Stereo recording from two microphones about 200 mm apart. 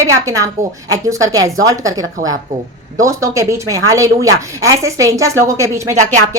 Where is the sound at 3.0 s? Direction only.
15° right (ahead or behind).